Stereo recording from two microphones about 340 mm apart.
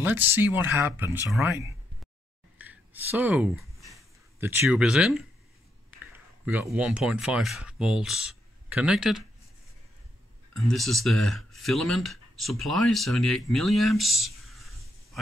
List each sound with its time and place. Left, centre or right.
0.0 s speech: centre
2.6 s a sound: centre
5.9 s speech: centre
10.6 s speech: centre